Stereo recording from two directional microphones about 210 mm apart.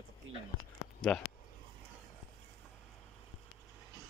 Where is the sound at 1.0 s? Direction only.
5° left (ahead or behind).